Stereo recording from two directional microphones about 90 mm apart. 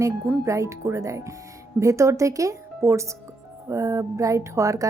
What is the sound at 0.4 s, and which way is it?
Speech, 35° right (ahead or behind).